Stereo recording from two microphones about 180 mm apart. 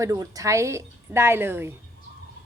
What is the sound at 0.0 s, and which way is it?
A woman's voice, 15° right (ahead or behind).